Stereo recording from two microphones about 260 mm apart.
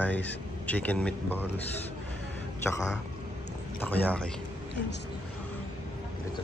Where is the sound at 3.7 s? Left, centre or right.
Centre.